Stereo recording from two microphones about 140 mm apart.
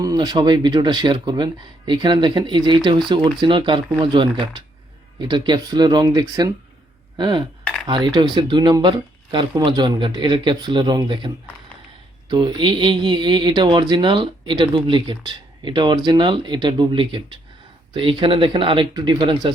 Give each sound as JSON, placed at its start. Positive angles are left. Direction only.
{"t": 0.0, "sound": "speech", "side_deg": -25}
{"t": 12.3, "sound": "speech", "side_deg": -35}